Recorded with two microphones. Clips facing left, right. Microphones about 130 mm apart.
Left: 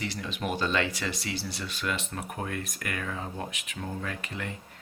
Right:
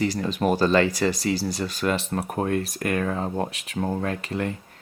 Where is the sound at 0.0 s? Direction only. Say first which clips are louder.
Right 10 dB; 40° right (ahead or behind).